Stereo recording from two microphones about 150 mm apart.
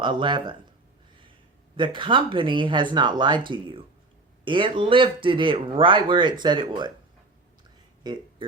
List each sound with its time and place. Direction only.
0.0 s speech: 30° right (ahead or behind)
1.7 s speech: 35° right (ahead or behind)
8.0 s a sound: 30° right (ahead or behind)